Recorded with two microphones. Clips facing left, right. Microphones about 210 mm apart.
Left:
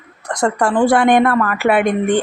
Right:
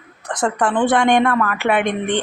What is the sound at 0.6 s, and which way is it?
A woman's voice, 10° left (ahead or behind).